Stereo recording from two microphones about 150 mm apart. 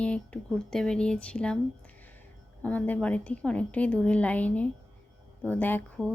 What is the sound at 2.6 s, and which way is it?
Speech, 10° left (ahead or behind).